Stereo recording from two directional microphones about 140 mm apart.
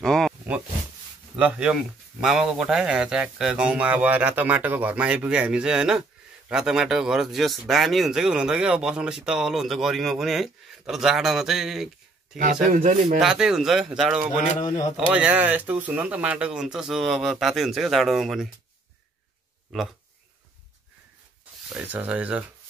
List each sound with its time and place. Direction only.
0.0 s a sound: 5° left (ahead or behind)
1.3 s speech: 10° right (ahead or behind)
12.6 s speech: 65° right (ahead or behind)
13.2 s speech: 5° right (ahead or behind)
21.7 s speech: 10° right (ahead or behind)